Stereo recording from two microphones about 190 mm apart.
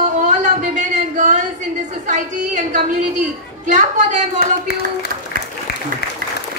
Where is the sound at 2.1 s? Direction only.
40° right (ahead or behind).